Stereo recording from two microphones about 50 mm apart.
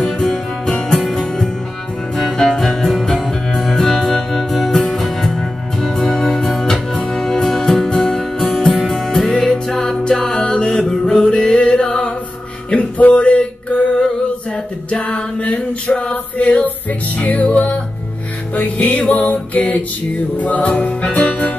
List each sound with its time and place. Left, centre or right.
0.0 s music: centre
12.7 s music: left